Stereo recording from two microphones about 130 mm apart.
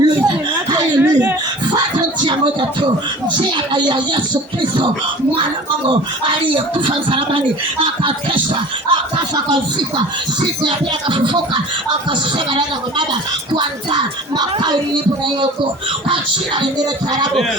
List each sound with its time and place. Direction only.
0.0 s chuckle: 30° right (ahead or behind)
2.2 s speech: 40° right (ahead or behind)
5.9 s speech: 40° right (ahead or behind)
8.9 s speech: 35° right (ahead or behind)
13.5 s speech: 35° right (ahead or behind)
16.6 s speech: 35° right (ahead or behind)